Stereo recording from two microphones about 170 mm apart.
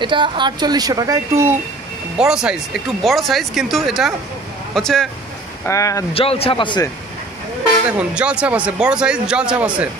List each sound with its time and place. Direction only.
0.0 s speech: 30° right (ahead or behind)
2.1 s speech: 5° right (ahead or behind)
5.7 s speech: 20° left (ahead or behind)
6.1 s a man's voice: 35° left (ahead or behind)
8.1 s speech: 5° right (ahead or behind)